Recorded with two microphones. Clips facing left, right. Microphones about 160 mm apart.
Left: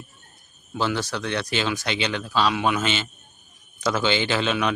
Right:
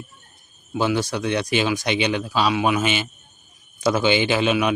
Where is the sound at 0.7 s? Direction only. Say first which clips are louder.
Right 4 dB; 10° right (ahead or behind).